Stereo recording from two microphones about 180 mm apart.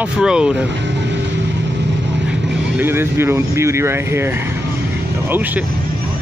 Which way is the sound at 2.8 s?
15° right (ahead or behind).